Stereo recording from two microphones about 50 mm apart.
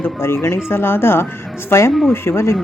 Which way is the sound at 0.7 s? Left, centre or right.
Left.